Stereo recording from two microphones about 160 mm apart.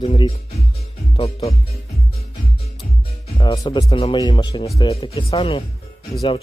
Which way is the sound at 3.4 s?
30° left (ahead or behind).